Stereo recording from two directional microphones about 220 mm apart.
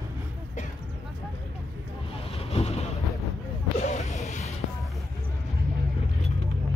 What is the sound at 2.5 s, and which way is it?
Vehicle, 30° left (ahead or behind).